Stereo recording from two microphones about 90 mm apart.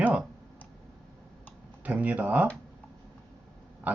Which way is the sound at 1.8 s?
15° right (ahead or behind).